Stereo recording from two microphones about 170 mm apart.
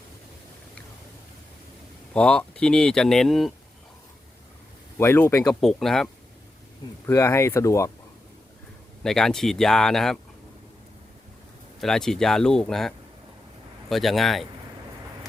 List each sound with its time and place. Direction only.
2.1 s speech: 5° left (ahead or behind)
4.9 s speech: 15° left (ahead or behind)
5.5 s speech: 5° left (ahead or behind)
7.0 s speech: 15° left (ahead or behind)
9.0 s speech: 5° left (ahead or behind)
11.8 s speech: 5° left (ahead or behind)
13.9 s speech: centre (ahead or behind)